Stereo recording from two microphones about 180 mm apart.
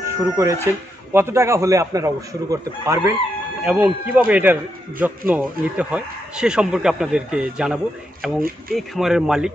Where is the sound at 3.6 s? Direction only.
5° right (ahead or behind).